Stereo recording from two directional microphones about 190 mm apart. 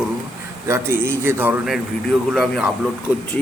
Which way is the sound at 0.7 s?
15° right (ahead or behind).